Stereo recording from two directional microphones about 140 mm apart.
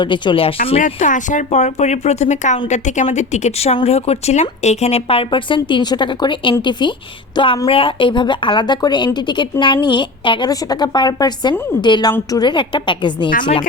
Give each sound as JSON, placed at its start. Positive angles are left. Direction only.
{"t": 0.0, "sound": "speech", "side_deg": 35}
{"t": 0.9, "sound": "speech", "side_deg": 60}